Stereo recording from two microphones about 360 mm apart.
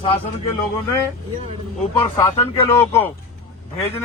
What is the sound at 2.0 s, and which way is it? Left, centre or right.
Speech, centre.